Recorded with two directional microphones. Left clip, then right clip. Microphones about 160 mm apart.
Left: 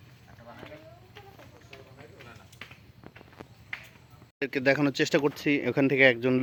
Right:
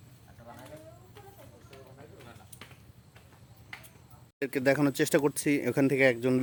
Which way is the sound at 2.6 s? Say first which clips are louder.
Left 6 dB; 90° right.